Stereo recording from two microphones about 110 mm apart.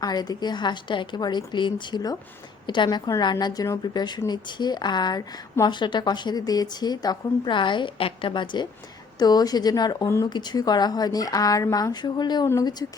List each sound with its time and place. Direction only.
0.0 s a woman's voice: 35° left (ahead or behind)